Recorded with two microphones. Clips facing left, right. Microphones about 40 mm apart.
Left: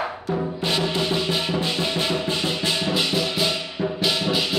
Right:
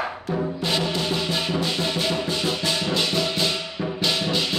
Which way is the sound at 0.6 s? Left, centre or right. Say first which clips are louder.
Left 2 dB; centre.